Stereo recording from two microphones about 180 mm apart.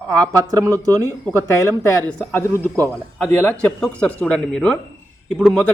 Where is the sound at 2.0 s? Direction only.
10° left (ahead or behind).